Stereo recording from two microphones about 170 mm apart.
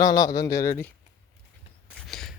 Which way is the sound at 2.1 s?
Centre (ahead or behind).